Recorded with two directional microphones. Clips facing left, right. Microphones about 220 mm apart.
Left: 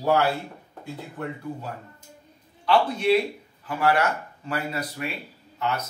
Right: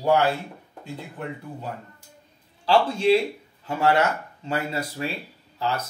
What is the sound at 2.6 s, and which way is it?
Speech, 30° right (ahead or behind).